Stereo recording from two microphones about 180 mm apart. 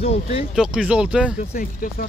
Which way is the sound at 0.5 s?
5° right (ahead or behind).